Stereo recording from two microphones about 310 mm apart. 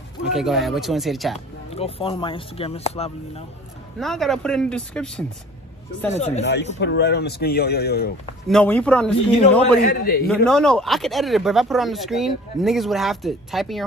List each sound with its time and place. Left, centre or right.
0.2 s speech: centre
1.7 s speech: centre
4.0 s speech: centre
6.1 s speech: left
6.4 s speech: left
8.5 s speech: centre
9.8 s speech: left
10.2 s speech: centre